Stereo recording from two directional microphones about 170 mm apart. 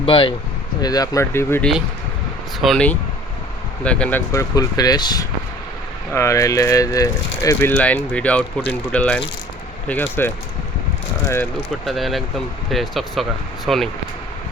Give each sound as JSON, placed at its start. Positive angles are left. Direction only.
{"t": 0.0, "sound": "speech", "side_deg": 30}
{"t": 0.8, "sound": "speech", "side_deg": 20}
{"t": 2.6, "sound": "speech", "side_deg": 5}
{"t": 4.3, "sound": "speech", "side_deg": 20}
{"t": 7.7, "sound": "speech", "side_deg": 10}
{"t": 11.9, "sound": "speech", "side_deg": 0}